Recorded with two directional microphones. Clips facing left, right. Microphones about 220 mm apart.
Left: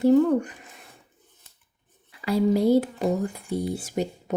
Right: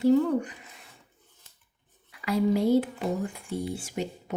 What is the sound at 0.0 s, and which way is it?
Speech, 50° left (ahead or behind).